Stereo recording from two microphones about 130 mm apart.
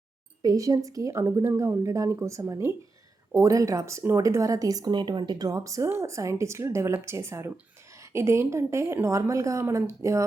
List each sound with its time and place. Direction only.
0.4 s speech: 25° right (ahead or behind)